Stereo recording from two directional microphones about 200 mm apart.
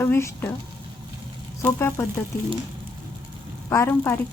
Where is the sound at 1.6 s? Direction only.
15° left (ahead or behind).